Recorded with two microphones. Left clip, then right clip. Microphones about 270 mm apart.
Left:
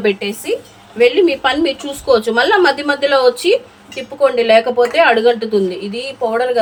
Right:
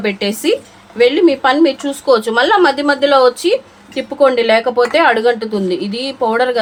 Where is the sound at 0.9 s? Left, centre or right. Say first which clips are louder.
Right 1 dB; right.